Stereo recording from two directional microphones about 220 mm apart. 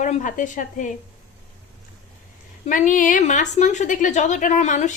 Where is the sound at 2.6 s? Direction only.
35° left (ahead or behind).